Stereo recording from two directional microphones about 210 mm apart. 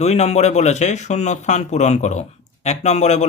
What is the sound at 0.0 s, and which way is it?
Speech, 30° left (ahead or behind).